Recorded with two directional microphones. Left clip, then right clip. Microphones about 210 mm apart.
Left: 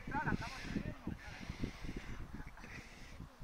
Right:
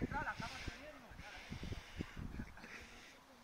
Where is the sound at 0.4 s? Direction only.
10° left (ahead or behind).